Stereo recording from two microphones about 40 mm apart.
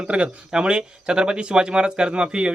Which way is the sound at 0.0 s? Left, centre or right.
Right.